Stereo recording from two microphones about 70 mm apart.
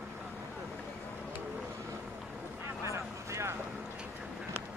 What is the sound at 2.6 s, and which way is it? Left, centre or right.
Vehicle, right.